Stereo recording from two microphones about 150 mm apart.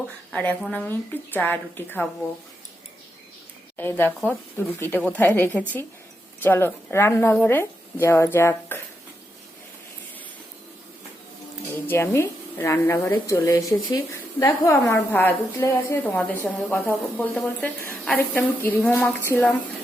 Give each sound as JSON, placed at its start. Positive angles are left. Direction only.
{"t": 0.3, "sound": "a woman's voice", "side_deg": 5}
{"t": 3.8, "sound": "a woman's voice", "side_deg": 15}
{"t": 11.9, "sound": "a woman's voice", "side_deg": 15}
{"t": 18.9, "sound": "a woman's voice", "side_deg": 0}
{"t": 19.3, "sound": "a woman's voice", "side_deg": 10}